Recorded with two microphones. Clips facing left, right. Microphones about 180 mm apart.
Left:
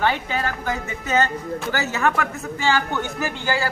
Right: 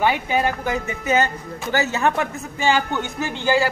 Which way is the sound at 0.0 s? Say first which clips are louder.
Right 3 dB; 15° right (ahead or behind).